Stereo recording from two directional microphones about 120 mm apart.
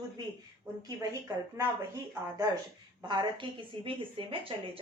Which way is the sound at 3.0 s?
35° right (ahead or behind).